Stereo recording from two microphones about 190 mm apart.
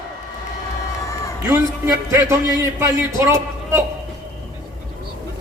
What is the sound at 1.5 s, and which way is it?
A man's voice, 15° right (ahead or behind).